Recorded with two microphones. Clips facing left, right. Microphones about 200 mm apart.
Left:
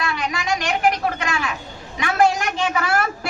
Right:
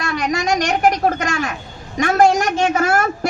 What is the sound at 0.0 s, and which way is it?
A woman's voice, 45° right (ahead or behind).